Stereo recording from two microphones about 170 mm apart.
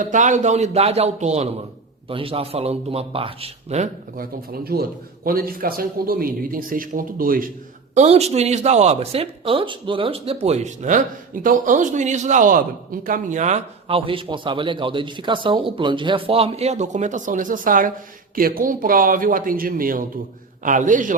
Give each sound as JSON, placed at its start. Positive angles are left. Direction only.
{"t": 0.0, "sound": "speech", "side_deg": -45}
{"t": 4.2, "sound": "a man's voice", "side_deg": -65}
{"t": 7.9, "sound": "a man's voice", "side_deg": -40}